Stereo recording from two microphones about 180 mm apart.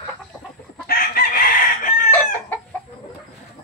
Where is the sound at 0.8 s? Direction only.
60° left (ahead or behind).